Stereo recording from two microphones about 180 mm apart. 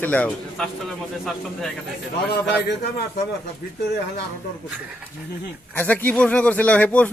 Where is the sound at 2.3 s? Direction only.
65° left (ahead or behind).